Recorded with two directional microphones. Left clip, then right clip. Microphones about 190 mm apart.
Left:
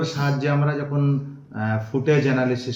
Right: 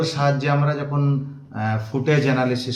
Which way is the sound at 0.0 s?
15° right (ahead or behind).